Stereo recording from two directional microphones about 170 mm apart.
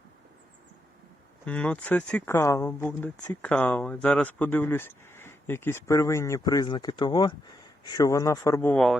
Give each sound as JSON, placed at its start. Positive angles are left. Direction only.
{"t": 1.5, "sound": "speech", "side_deg": 10}
{"t": 8.7, "sound": "speech", "side_deg": 0}